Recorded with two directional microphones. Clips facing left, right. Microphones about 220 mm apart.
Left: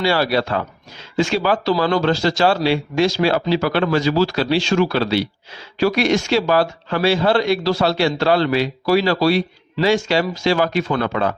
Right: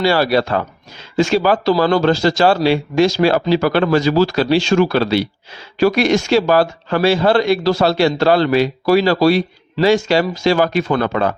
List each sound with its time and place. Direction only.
0.0 s speech: 40° right (ahead or behind)